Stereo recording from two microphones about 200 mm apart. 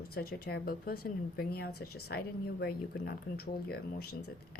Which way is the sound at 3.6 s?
50° left (ahead or behind).